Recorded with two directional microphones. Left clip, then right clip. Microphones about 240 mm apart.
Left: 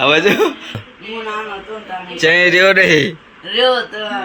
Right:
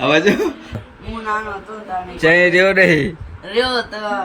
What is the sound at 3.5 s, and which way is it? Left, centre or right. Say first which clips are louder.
Speech: left 5 dB; right.